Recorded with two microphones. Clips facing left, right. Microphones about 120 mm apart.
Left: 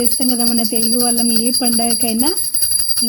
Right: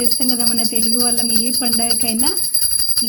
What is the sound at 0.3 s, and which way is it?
Speech, 30° left (ahead or behind).